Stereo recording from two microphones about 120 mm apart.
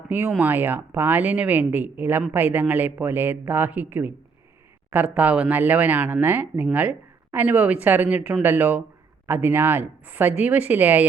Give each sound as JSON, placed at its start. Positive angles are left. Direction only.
{"t": 0.1, "sound": "speech", "side_deg": -20}